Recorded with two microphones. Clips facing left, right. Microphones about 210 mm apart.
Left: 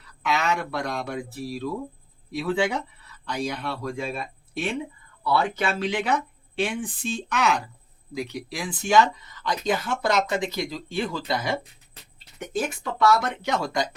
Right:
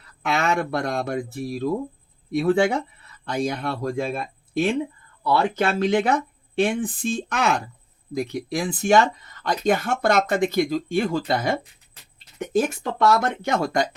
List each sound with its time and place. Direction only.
0.0 s speech: 50° right (ahead or behind)
12.8 s speech: 50° right (ahead or behind)